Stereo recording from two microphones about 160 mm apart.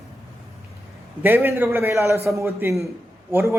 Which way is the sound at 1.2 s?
15° right (ahead or behind).